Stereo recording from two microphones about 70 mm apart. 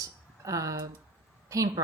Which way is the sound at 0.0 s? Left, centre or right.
Right.